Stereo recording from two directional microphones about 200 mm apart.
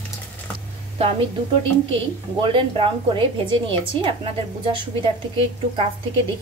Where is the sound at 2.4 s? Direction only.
25° right (ahead or behind).